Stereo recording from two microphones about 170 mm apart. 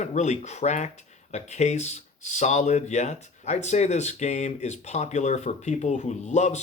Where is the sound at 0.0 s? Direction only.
45° left (ahead or behind).